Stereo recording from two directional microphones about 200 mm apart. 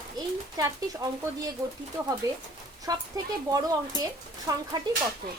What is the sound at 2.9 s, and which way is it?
A woman's voice, 20° right (ahead or behind).